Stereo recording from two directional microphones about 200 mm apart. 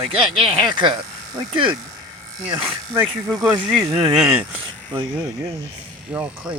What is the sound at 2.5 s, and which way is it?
Speech, 15° right (ahead or behind).